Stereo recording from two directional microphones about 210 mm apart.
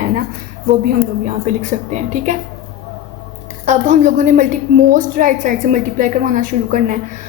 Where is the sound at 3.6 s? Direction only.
35° right (ahead or behind).